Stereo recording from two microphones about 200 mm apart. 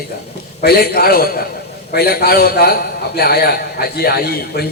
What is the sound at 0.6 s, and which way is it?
A man's voice, 50° left (ahead or behind).